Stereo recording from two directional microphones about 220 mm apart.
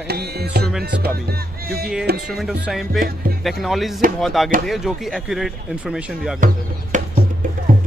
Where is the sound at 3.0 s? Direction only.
40° right (ahead or behind).